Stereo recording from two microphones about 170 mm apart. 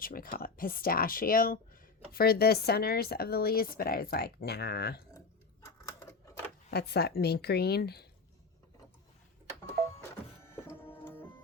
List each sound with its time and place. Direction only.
0.0 s speech: 55° left (ahead or behind)
5.6 s typewriter: 15° left (ahead or behind)
6.7 s a woman's voice: 70° left (ahead or behind)
9.8 s printer: 45° right (ahead or behind)
10.5 s printer: 15° left (ahead or behind)